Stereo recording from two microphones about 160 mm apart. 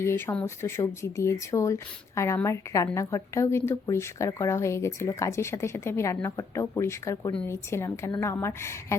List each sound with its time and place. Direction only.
0.0 s speech: 15° left (ahead or behind)